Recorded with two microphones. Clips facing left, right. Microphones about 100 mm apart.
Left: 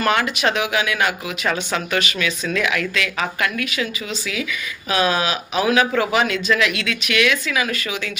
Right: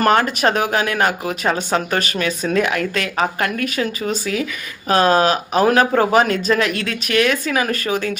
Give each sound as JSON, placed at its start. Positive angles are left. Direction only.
{"t": 0.0, "sound": "speech", "side_deg": -40}